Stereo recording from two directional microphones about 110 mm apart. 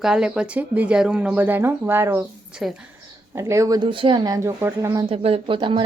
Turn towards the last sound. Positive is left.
turn(degrees=-50)  # may be behind; listen again after turning